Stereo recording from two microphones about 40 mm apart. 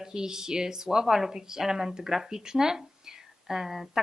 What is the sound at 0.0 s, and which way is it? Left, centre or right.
Speech, centre.